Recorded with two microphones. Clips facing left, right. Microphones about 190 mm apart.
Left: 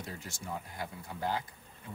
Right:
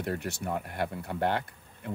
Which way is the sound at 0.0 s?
65° right (ahead or behind).